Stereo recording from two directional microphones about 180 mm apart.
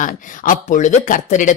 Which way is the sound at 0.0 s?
45° left (ahead or behind).